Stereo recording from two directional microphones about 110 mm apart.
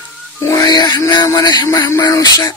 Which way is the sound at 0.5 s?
35° left (ahead or behind).